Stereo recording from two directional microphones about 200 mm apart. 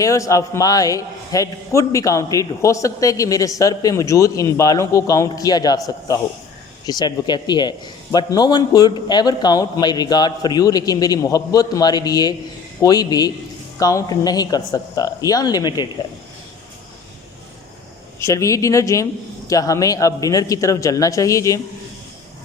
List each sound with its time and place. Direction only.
0.0 s a man's voice: 15° left (ahead or behind)
18.2 s a man's voice: 15° left (ahead or behind)